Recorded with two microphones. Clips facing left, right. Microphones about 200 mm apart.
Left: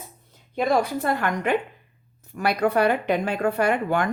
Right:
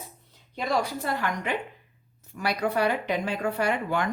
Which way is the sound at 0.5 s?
55° left (ahead or behind).